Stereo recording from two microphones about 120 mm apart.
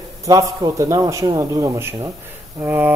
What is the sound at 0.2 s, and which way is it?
Speech, 30° right (ahead or behind).